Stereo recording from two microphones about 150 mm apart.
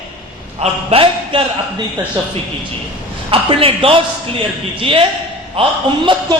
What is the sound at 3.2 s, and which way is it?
A man's voice, 40° right (ahead or behind).